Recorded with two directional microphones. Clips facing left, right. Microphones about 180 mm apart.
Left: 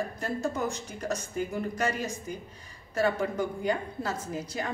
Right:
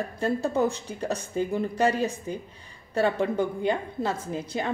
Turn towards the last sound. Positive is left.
turn(degrees=-30)  # may be behind; listen again after turning